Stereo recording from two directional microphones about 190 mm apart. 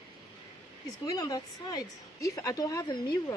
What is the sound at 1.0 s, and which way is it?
A woman's voice, 20° left (ahead or behind).